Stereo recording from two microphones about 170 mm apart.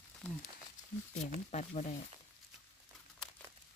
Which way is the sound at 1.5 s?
40° left (ahead or behind).